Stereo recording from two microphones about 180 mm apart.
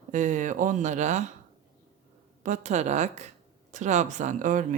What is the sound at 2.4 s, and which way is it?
Speech, 40° right (ahead or behind).